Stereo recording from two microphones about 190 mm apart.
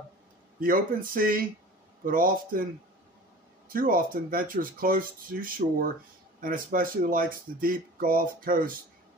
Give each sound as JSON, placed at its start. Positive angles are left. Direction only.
{"t": 0.6, "sound": "speech", "side_deg": -50}